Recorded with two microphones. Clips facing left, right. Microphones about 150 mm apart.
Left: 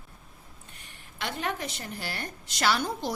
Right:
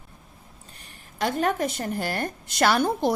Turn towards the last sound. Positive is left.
turn(degrees=-55)  # may be behind; listen again after turning